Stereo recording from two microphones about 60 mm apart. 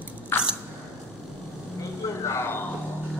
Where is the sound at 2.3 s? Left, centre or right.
Left.